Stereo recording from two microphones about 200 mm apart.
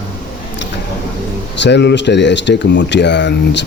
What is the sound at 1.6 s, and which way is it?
Speech, 60° left (ahead or behind).